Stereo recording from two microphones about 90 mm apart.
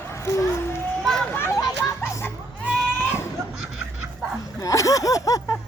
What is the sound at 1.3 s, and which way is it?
Speech, 25° left (ahead or behind).